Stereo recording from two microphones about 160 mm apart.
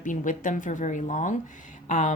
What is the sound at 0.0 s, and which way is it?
A woman's voice, 55° left (ahead or behind).